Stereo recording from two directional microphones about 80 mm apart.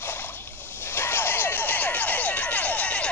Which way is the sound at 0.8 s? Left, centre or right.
Left.